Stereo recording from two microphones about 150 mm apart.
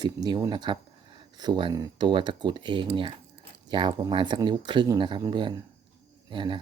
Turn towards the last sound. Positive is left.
turn(degrees=-35)  # may be behind; listen again after turning